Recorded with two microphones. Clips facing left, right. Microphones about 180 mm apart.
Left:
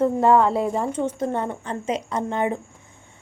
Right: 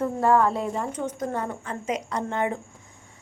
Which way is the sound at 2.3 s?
20° left (ahead or behind).